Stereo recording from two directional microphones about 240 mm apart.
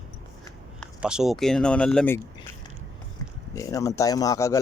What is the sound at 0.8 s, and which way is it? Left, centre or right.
Speech, centre.